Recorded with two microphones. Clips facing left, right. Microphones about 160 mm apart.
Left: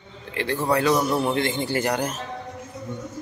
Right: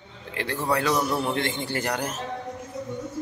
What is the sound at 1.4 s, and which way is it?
Speech, 5° left (ahead or behind).